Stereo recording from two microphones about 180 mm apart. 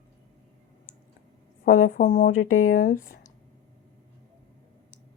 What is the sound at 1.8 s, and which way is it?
Speech, 45° left (ahead or behind).